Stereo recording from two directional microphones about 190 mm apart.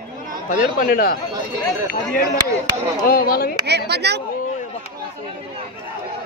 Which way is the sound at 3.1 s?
50° left (ahead or behind).